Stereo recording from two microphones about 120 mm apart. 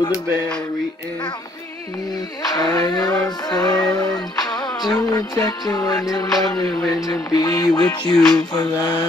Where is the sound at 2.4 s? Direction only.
30° left (ahead or behind).